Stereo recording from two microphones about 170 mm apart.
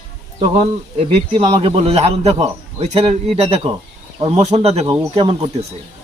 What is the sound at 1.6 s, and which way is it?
A man's voice, 35° right (ahead or behind).